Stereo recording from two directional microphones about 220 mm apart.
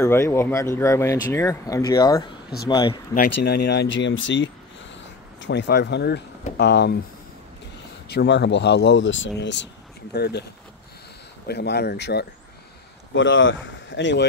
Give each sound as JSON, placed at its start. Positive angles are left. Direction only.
{"t": 0.0, "sound": "speech", "side_deg": 10}
{"t": 3.4, "sound": "speech", "side_deg": 45}
{"t": 8.1, "sound": "speech", "side_deg": 50}
{"t": 11.4, "sound": "speech", "side_deg": 50}